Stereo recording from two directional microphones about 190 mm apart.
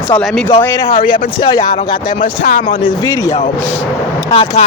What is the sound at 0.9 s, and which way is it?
Speech, 45° left (ahead or behind).